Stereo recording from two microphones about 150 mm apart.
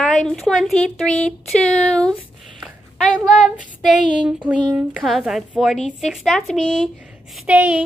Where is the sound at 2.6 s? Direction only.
Centre (ahead or behind).